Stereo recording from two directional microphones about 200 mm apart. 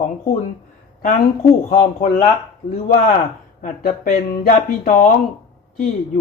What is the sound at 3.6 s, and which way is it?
Speech, 45° left (ahead or behind).